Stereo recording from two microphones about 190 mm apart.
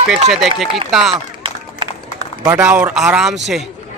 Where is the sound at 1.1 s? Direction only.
25° right (ahead or behind).